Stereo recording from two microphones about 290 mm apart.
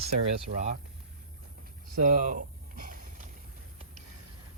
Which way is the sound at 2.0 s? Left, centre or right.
Right.